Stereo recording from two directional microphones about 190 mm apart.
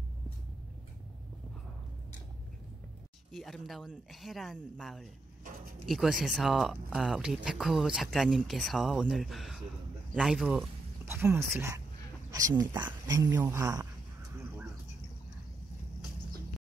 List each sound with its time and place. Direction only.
3.3 s speech: centre (ahead or behind); by 13.8 s 15° right (ahead or behind)